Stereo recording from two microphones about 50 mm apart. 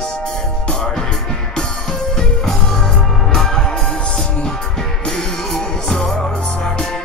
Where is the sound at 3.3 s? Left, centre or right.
Centre.